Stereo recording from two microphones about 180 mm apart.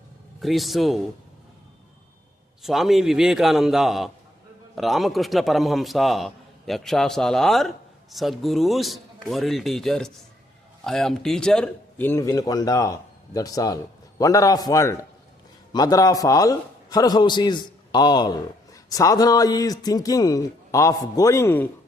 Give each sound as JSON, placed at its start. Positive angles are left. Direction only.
{"t": 0.4, "sound": "a man's voice", "side_deg": 0}
{"t": 2.6, "sound": "a man's voice", "side_deg": 0}